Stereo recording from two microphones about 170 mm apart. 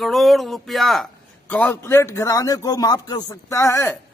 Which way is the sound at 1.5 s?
10° left (ahead or behind).